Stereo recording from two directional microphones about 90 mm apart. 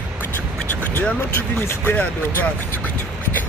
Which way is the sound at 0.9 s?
25° left (ahead or behind).